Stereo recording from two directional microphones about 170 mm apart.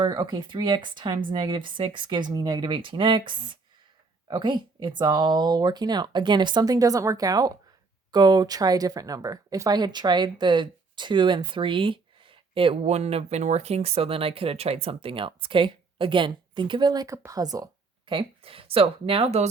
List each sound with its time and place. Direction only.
0.0 s speech: 25° right (ahead or behind)